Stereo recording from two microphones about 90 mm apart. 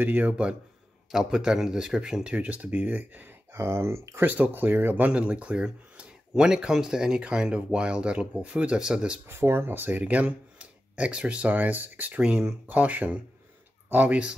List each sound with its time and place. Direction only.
0.0 s speech: 20° right (ahead or behind)
1.1 s speech: 5° right (ahead or behind)
9.3 s speech: 25° right (ahead or behind)
12.2 s speech: 10° right (ahead or behind)